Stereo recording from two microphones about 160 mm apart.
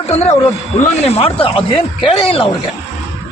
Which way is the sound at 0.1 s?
45° left (ahead or behind).